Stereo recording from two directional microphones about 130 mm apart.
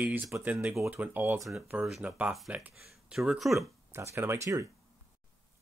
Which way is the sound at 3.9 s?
20° right (ahead or behind).